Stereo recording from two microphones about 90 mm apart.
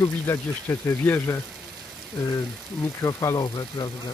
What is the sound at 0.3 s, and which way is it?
Speech, 25° left (ahead or behind).